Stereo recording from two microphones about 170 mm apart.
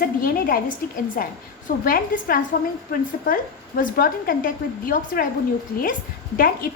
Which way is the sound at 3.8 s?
55° left (ahead or behind).